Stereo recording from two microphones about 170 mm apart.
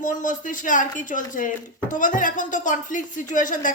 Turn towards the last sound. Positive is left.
turn(degrees=50)  # may be behind; listen again after turning